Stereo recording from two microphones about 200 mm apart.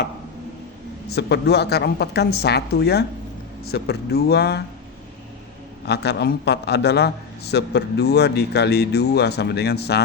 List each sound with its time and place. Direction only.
1.1 s a man's voice: 55° left (ahead or behind)
5.8 s a man's voice: 55° left (ahead or behind)